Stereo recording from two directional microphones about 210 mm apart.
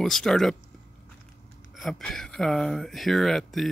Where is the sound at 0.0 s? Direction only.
Centre (ahead or behind).